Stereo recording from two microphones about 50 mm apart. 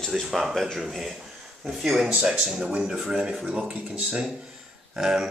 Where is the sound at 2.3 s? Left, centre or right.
Centre.